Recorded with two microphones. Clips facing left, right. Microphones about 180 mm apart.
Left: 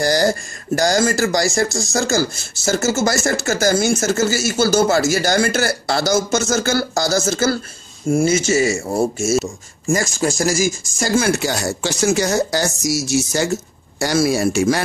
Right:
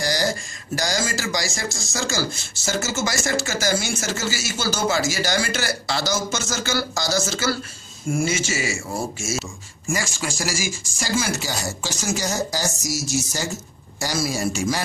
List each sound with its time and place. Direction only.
0.0 s speech: 50° left (ahead or behind)